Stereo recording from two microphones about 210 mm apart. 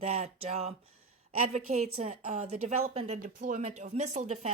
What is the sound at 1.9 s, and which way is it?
A woman's voice, 30° right (ahead or behind).